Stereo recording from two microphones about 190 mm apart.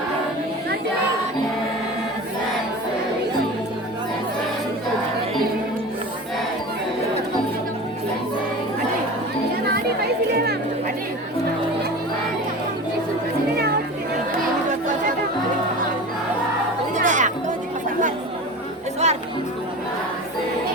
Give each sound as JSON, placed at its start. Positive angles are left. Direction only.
{"t": 9.7, "sound": "children playing", "side_deg": -55}
{"t": 16.9, "sound": "music", "side_deg": -40}
{"t": 19.0, "sound": "music", "side_deg": -35}